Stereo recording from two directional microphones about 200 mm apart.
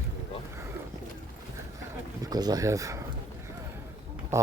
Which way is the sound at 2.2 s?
20° right (ahead or behind).